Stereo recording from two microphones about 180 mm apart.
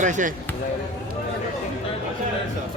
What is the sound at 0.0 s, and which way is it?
Speech, 45° right (ahead or behind).